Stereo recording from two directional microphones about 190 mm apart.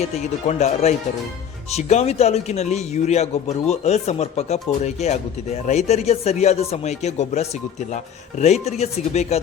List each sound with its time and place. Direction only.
0.0 s a man's voice: 35° left (ahead or behind)